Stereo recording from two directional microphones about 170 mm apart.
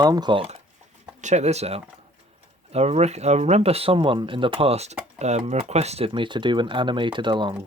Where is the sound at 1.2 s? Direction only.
40° right (ahead or behind).